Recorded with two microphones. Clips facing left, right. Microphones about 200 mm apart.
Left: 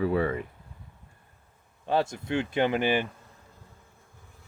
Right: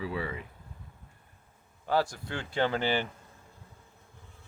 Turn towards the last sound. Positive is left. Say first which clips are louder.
# left 3 dB
turn(degrees=15)  # may be behind; listen again after turning